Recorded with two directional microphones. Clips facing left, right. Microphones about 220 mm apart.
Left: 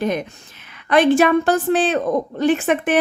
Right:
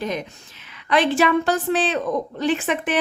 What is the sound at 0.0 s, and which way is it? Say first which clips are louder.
A woman's voice: left 5 dB; 55° left (ahead or behind).